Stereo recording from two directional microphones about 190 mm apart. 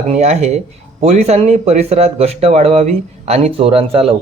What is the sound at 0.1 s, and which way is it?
Speech, 35° right (ahead or behind).